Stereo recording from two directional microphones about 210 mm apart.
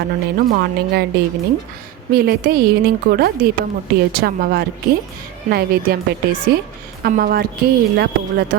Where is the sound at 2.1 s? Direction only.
45° right (ahead or behind).